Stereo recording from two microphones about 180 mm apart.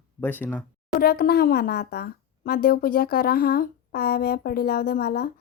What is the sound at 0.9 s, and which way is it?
Speech, 60° left (ahead or behind).